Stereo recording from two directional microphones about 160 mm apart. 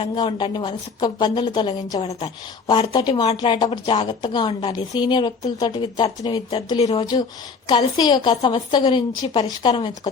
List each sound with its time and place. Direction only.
0.0 s a woman's voice: 30° left (ahead or behind)
6.7 s speech: 40° left (ahead or behind)
7.7 s a woman's voice: 25° left (ahead or behind)